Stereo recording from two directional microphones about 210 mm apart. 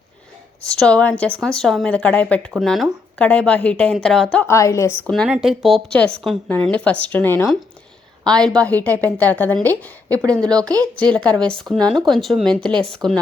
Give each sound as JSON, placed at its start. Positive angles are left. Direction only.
{"t": 0.7, "sound": "a woman's voice", "side_deg": 5}
{"t": 10.1, "sound": "speech", "side_deg": -15}
{"t": 11.7, "sound": "a woman's voice", "side_deg": 0}
{"t": 13.0, "sound": "speech", "side_deg": -20}